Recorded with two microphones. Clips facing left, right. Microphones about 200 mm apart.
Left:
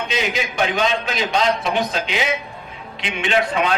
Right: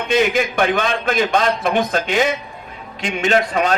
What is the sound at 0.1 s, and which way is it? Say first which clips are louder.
A man's voice: right 12 dB; 55° right (ahead or behind).